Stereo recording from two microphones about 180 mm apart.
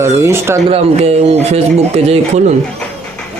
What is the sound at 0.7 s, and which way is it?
Speech, 35° right (ahead or behind).